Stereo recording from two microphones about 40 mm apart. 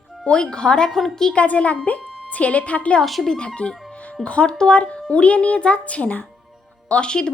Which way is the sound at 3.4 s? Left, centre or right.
Left.